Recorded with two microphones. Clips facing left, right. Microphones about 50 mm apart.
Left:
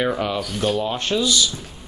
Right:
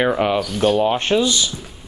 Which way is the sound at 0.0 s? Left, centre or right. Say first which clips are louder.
Right 5 dB; right.